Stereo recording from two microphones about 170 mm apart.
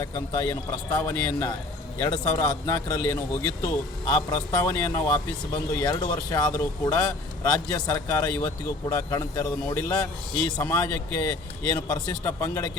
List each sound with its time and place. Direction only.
0.0 s speech: 20° left (ahead or behind)